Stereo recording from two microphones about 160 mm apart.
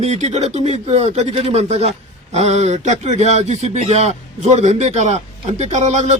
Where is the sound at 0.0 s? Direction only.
45° right (ahead or behind).